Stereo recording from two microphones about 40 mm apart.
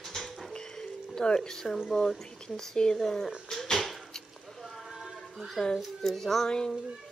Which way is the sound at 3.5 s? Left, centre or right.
Centre.